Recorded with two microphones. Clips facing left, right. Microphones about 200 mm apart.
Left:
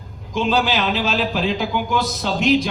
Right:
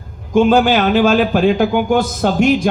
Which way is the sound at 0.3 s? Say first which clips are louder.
Right 8 dB; 50° right (ahead or behind).